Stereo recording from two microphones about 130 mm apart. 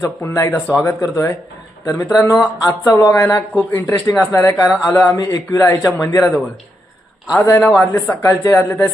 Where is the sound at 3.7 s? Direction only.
15° left (ahead or behind).